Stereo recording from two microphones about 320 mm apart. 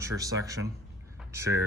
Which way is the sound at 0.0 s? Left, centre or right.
Centre.